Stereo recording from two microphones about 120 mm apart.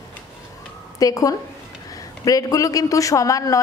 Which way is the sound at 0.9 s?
30° left (ahead or behind).